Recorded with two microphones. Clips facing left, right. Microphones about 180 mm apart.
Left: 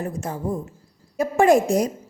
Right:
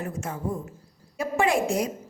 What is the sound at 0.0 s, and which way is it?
A woman's voice, 35° left (ahead or behind).